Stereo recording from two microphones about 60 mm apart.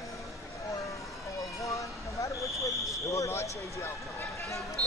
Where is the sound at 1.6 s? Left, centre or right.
Left.